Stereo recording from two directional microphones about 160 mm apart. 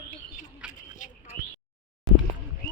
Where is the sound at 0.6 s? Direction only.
5° right (ahead or behind).